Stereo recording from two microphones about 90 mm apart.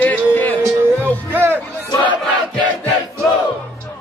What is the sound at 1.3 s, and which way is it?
Music, 20° right (ahead or behind).